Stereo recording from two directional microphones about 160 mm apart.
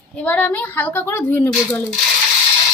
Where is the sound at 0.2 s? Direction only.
10° left (ahead or behind).